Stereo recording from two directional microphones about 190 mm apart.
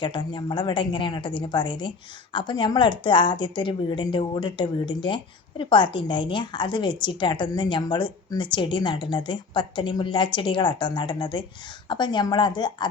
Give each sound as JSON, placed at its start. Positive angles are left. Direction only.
{"t": 0.0, "sound": "a woman's voice", "side_deg": 25}